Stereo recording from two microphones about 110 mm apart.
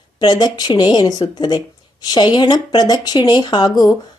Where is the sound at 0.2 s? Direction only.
40° left (ahead or behind).